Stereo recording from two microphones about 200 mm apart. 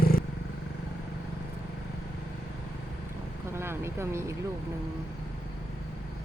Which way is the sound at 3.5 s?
10° right (ahead or behind).